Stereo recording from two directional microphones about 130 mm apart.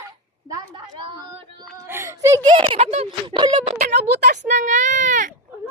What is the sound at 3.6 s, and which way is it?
Speech, 65° right (ahead or behind).